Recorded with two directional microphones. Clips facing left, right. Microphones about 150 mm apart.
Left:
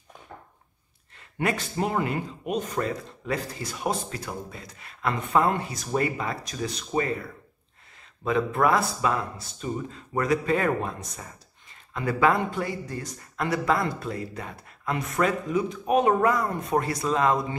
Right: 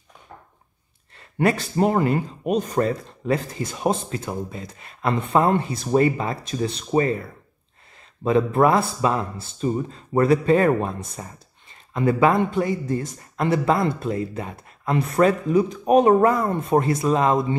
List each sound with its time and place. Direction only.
1.4 s speech: 35° right (ahead or behind)
3.6 s speech: 25° right (ahead or behind)
8.2 s speech: 30° right (ahead or behind)